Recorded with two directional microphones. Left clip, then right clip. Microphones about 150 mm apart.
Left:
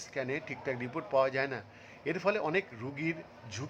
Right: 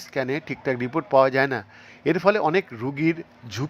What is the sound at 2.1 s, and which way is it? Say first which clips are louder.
A man's voice: right 11 dB; 35° right (ahead or behind).